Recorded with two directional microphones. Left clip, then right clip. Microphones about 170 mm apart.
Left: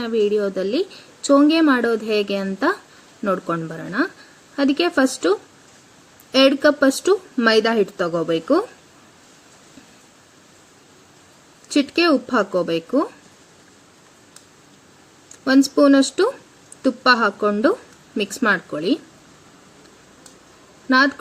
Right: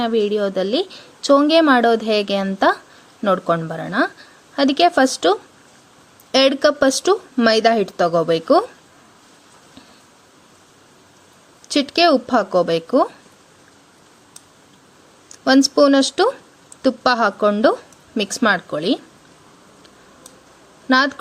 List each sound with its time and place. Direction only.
0.0 s a woman's voice: 45° right (ahead or behind)
11.7 s a woman's voice: 45° right (ahead or behind)
15.4 s a woman's voice: 45° right (ahead or behind)